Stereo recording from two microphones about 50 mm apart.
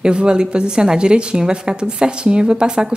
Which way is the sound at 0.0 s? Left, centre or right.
Centre.